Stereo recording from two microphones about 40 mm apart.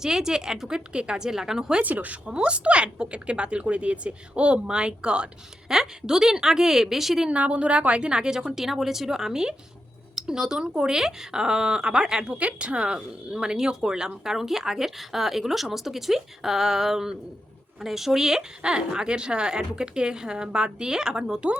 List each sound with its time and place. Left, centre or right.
0.0 s a woman's voice: centre
1.8 s speech: right
2.2 s a woman's voice: right; by 7.3 s centre
7.3 s a woman's voice: right
12.4 s a woman's voice: right